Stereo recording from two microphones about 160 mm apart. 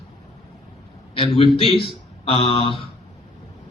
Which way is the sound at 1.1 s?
35° left (ahead or behind).